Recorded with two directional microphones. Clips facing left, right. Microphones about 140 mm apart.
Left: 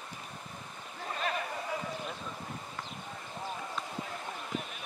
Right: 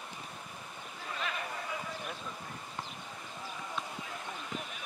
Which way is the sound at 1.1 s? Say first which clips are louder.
Left 4 dB; 40° left (ahead or behind).